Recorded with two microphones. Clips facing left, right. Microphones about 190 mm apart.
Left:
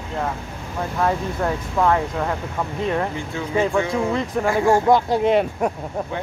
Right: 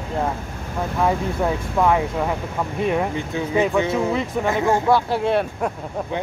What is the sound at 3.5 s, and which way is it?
Speech, 20° right (ahead or behind).